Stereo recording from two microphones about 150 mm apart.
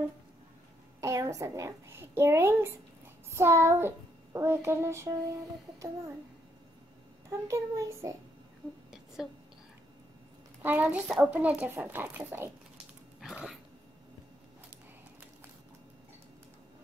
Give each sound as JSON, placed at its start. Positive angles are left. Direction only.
{"t": 1.0, "sound": "a child's voice", "side_deg": -20}
{"t": 7.2, "sound": "a child's voice", "side_deg": -20}
{"t": 8.9, "sound": "a sound", "side_deg": -5}
{"t": 10.6, "sound": "a child's voice", "side_deg": -10}
{"t": 13.2, "sound": "dog", "side_deg": 0}